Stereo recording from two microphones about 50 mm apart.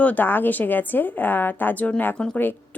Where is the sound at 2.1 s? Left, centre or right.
Centre.